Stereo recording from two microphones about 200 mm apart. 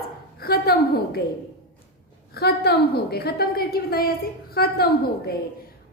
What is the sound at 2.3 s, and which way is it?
A woman's voice, 55° left (ahead or behind).